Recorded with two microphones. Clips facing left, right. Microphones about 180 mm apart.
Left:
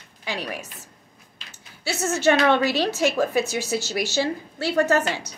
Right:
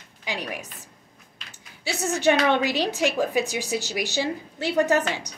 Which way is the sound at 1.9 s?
15° right (ahead or behind).